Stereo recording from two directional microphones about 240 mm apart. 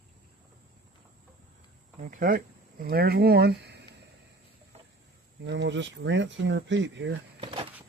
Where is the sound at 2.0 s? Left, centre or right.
Right.